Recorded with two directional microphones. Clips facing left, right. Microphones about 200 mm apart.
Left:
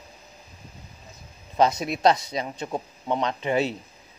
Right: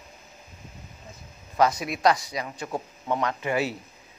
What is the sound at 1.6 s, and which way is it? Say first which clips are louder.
Speech: left 2 dB; 25° left (ahead or behind).